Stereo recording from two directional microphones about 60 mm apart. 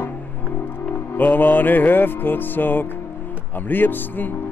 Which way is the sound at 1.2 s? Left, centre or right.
Left.